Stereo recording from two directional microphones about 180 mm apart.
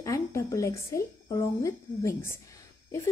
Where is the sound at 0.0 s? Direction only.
15° left (ahead or behind).